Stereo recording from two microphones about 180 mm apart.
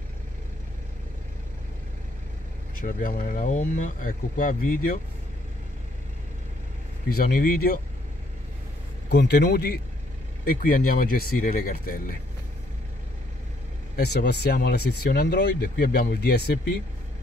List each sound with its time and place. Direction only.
2.7 s speech: 50° left (ahead or behind)
7.1 s speech: 60° left (ahead or behind)
9.1 s speech: 65° left (ahead or behind)
10.4 s speech: 50° left (ahead or behind)
13.9 s speech: 65° left (ahead or behind)